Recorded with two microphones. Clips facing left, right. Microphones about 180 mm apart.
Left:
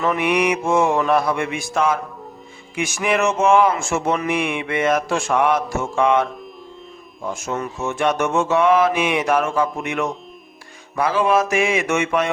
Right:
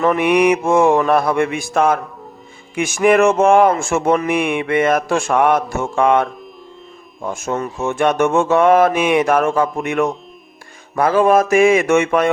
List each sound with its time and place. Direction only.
0.0 s speech: 50° right (ahead or behind)